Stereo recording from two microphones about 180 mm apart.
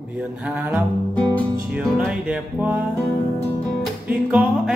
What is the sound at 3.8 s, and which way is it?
Music, 5° right (ahead or behind).